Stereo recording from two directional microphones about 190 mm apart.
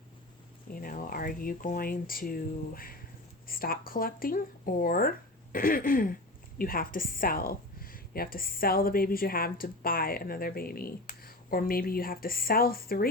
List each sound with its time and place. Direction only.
0.7 s a woman's voice: 45° left (ahead or behind)